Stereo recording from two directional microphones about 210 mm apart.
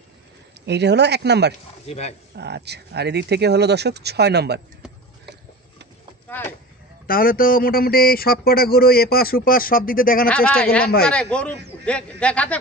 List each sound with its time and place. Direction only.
0.7 s speech: 55° right (ahead or behind)
1.9 s speech: 30° left (ahead or behind)
2.3 s speech: 50° right (ahead or behind)
6.2 s a sound: 10° left (ahead or behind)
7.1 s a man's voice: 45° left (ahead or behind)
10.2 s speech: 5° left (ahead or behind)